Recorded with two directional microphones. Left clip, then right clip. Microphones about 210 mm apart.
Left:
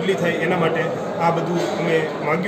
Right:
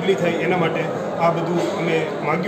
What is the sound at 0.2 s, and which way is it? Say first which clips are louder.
A man's voice: even; centre (ahead or behind).